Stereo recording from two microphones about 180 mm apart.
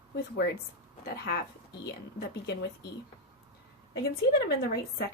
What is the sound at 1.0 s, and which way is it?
A woman's voice, 60° left (ahead or behind).